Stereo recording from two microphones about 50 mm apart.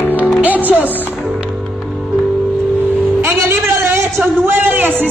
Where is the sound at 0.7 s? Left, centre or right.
Right.